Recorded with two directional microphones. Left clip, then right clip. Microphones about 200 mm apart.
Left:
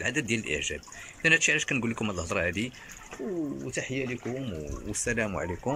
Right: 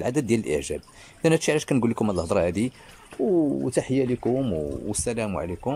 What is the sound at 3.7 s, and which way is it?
Speech, 35° right (ahead or behind).